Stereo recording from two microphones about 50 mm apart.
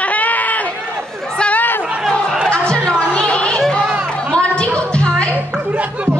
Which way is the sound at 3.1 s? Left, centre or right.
Left.